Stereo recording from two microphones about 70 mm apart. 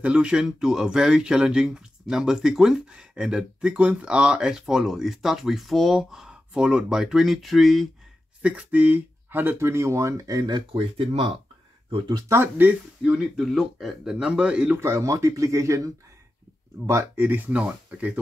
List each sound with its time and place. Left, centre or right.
0.0 s speech: centre
8.4 s speech: centre; by 10.6 s right
12.3 s speech: right
13.0 s speech: centre
13.4 s speech: centre
14.1 s speech: centre
14.8 s speech: right
17.0 s speech: right